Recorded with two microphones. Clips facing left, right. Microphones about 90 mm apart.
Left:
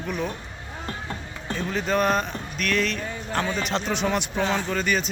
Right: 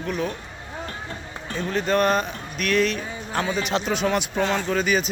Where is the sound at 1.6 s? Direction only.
Centre (ahead or behind).